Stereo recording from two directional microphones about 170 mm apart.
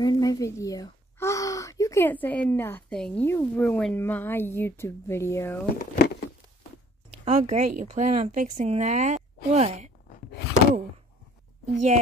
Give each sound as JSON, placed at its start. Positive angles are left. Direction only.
{"t": 0.0, "sound": "speech", "side_deg": 20}
{"t": 5.8, "sound": "speech", "side_deg": 70}
{"t": 7.2, "sound": "speech", "side_deg": -40}
{"t": 11.6, "sound": "a woman's voice", "side_deg": -45}